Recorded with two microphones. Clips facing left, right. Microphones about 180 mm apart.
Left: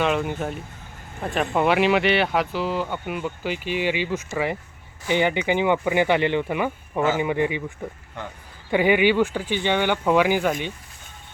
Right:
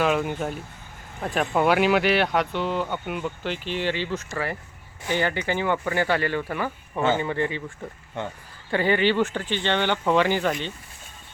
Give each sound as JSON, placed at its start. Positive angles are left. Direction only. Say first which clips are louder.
{"t": 0.0, "sound": "speech", "louder": "even", "side_deg": 0}
{"t": 8.7, "sound": "speech", "louder": "left 3 dB", "side_deg": 15}